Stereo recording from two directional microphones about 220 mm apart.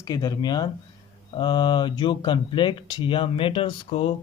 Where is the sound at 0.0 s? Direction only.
15° left (ahead or behind).